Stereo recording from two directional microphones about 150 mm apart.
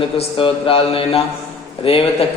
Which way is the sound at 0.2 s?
40° left (ahead or behind).